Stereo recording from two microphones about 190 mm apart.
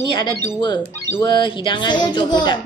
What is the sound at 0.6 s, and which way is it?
Speech, 20° left (ahead or behind).